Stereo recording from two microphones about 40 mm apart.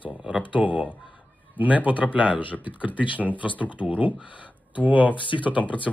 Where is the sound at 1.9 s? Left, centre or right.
Right.